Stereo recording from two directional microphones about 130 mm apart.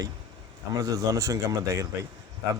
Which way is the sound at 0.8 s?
25° right (ahead or behind).